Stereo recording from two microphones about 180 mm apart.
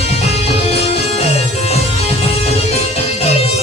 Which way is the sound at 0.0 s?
35° left (ahead or behind).